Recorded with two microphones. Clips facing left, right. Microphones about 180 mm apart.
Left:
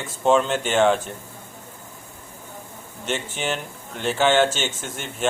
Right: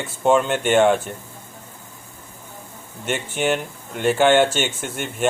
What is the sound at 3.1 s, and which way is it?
Speech, 10° right (ahead or behind).